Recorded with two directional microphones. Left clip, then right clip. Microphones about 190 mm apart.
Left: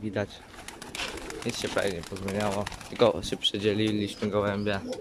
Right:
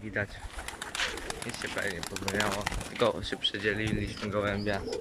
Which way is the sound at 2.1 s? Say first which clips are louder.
Right 1 dB; 55° right (ahead or behind).